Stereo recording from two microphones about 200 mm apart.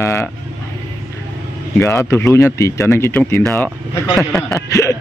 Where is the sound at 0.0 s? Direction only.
15° left (ahead or behind).